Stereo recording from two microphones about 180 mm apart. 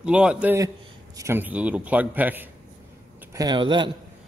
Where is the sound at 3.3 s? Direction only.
25° right (ahead or behind).